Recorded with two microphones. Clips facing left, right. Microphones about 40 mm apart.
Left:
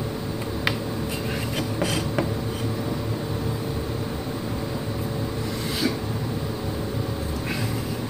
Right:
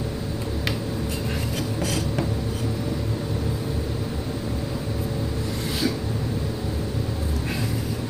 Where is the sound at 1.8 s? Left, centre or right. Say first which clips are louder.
Left 2 dB; centre.